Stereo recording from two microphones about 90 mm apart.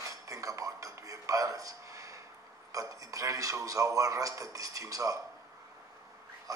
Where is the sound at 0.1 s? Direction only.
40° right (ahead or behind).